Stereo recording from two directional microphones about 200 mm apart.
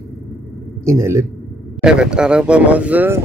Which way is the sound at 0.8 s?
15° right (ahead or behind).